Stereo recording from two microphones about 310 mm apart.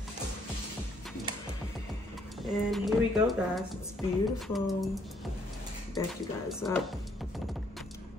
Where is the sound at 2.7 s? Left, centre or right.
Centre.